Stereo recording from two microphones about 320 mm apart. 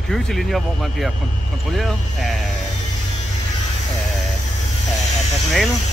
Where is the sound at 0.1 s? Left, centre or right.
Centre.